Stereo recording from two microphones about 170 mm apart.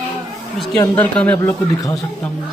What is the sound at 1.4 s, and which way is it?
Speech, 20° left (ahead or behind).